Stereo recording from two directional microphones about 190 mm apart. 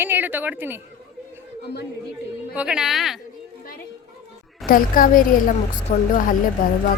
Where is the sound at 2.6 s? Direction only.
5° right (ahead or behind).